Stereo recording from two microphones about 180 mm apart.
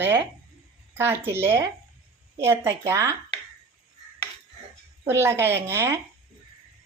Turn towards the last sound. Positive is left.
turn(degrees=-15)  # may be behind; listen again after turning